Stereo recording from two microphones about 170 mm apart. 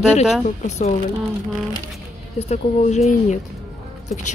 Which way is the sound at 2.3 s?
40° left (ahead or behind).